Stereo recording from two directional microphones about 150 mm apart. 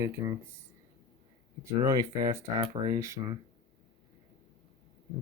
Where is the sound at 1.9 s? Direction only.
20° right (ahead or behind).